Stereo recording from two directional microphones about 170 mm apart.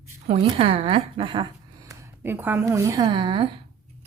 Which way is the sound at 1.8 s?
10° right (ahead or behind).